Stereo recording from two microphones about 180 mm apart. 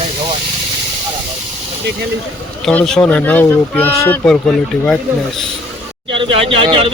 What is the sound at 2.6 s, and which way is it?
Speech, 5° left (ahead or behind).